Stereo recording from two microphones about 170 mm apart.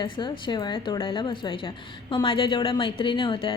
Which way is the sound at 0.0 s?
30° left (ahead or behind).